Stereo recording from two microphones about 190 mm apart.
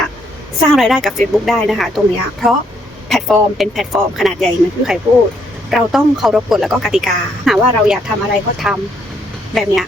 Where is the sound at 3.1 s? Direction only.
Centre (ahead or behind).